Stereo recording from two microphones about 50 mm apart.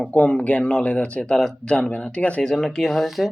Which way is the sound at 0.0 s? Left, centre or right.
Left.